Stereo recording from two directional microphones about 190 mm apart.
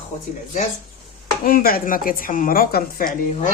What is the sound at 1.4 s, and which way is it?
Speech, 50° left (ahead or behind).